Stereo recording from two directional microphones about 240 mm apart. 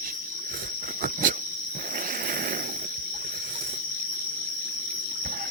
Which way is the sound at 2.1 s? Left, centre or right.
Right.